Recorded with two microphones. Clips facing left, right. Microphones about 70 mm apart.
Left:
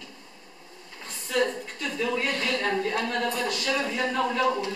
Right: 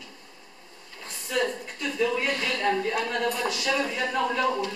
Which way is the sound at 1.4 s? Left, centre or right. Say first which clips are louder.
Left 3 dB; centre.